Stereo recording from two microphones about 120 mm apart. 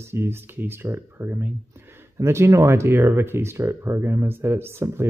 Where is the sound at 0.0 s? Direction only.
20° right (ahead or behind).